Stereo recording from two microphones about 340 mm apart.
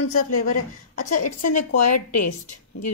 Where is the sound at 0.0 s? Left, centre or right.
Left.